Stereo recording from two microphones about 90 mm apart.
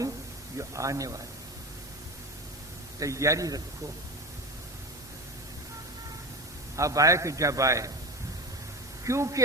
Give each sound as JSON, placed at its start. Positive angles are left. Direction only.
{"t": 0.7, "sound": "a man's voice", "side_deg": -35}
{"t": 3.0, "sound": "a man's voice", "side_deg": -35}
{"t": 6.7, "sound": "a man's voice", "side_deg": -35}
{"t": 9.0, "sound": "a man's voice", "side_deg": -35}